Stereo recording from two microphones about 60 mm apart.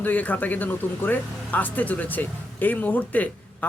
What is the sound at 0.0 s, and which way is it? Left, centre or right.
Speech, left.